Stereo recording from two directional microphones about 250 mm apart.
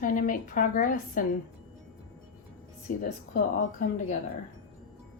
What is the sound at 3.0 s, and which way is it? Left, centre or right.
A woman's voice, left.